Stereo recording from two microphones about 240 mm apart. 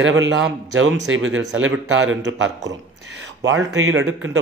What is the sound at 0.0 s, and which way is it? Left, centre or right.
A man's voice, right.